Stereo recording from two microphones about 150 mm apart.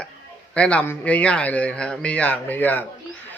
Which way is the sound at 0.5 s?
10° left (ahead or behind).